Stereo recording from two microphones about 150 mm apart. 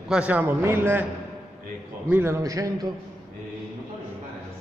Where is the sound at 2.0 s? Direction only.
15° right (ahead or behind).